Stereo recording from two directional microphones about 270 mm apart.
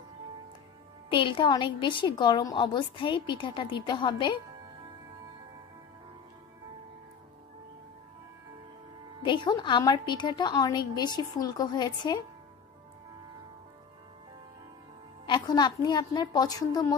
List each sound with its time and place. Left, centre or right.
1.1 s a woman's voice: centre
9.2 s a woman's voice: centre
15.2 s a woman's voice: centre